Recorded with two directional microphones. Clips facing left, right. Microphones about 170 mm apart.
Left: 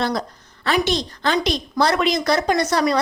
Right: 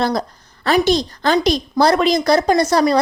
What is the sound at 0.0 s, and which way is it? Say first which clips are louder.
A woman's voice: right 4 dB; 40° right (ahead or behind).